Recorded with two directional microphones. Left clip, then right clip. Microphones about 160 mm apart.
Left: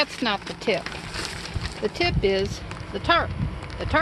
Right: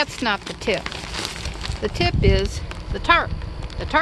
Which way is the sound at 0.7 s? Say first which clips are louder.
Right 2 dB; 85° right.